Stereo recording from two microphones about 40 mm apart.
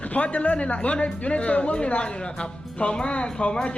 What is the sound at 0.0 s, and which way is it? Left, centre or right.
Speech, left.